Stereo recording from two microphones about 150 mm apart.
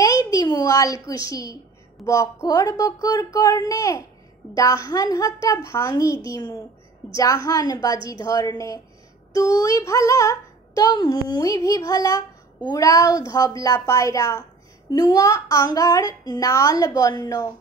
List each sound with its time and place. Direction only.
0.0 s a child's voice: 25° left (ahead or behind)
2.0 s female singing: 25° left (ahead or behind)